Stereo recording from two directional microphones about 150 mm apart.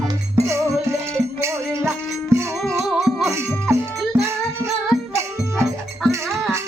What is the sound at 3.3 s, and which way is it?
Music, 15° right (ahead or behind).